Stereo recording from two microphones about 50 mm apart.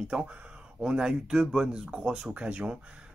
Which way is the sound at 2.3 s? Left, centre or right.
Right.